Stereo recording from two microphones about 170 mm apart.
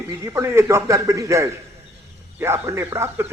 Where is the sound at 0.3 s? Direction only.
15° right (ahead or behind).